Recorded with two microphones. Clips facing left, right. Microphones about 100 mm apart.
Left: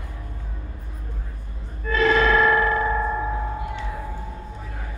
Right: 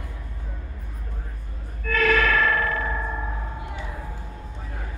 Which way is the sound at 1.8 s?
25° left (ahead or behind).